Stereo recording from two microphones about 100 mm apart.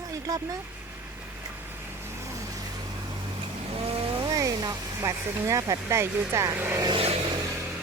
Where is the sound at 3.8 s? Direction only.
75° right (ahead or behind).